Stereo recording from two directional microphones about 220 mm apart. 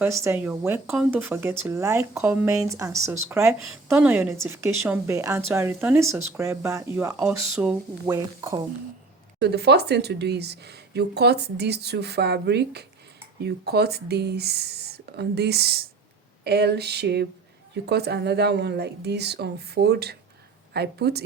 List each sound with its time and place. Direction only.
0.0 s a woman's voice: 10° right (ahead or behind)
9.4 s speech: 50° right (ahead or behind)